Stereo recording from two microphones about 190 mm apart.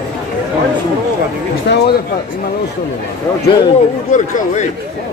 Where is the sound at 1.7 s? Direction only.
55° left (ahead or behind).